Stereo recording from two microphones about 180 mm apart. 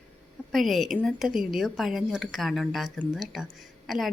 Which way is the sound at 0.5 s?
Centre (ahead or behind).